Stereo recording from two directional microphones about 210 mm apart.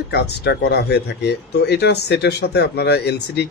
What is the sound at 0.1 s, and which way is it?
Speech, 55° left (ahead or behind).